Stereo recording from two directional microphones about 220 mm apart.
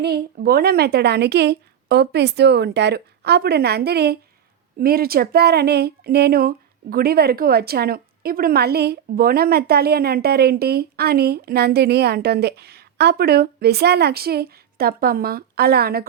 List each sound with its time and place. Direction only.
0.0 s a woman's voice: 45° right (ahead or behind)